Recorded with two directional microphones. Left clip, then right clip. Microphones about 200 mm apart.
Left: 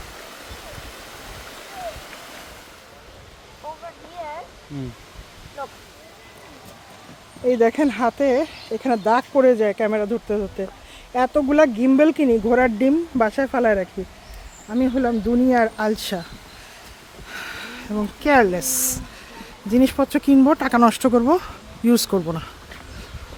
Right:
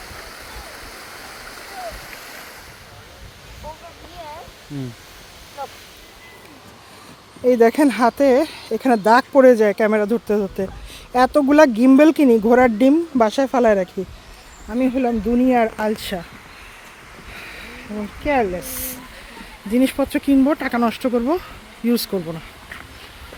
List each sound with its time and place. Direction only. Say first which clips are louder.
7.4 s speech: right 3 dB; 30° right (ahead or behind); by 15.7 s 15° right (ahead or behind)
15.8 s speech: even; 5° left (ahead or behind)
17.3 s a sound: left 4 dB; 20° left (ahead or behind)
18.2 s speech: left 3 dB; 25° left (ahead or behind)
19.7 s speech: left 1 dB; 5° left (ahead or behind)